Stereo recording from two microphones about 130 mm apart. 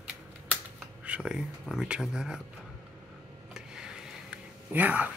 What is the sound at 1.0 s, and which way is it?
Speech, 10° right (ahead or behind).